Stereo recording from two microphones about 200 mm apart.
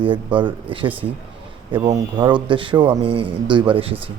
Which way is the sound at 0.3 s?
25° right (ahead or behind).